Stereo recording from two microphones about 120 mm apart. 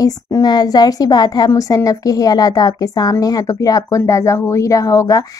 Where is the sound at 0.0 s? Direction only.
30° left (ahead or behind).